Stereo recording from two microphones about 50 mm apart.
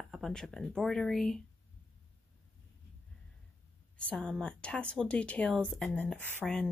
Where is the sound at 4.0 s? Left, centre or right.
Left.